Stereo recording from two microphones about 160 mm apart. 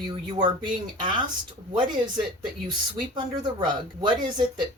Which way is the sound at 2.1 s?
30° right (ahead or behind).